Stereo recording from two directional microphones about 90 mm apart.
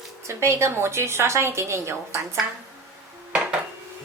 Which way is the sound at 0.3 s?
30° right (ahead or behind).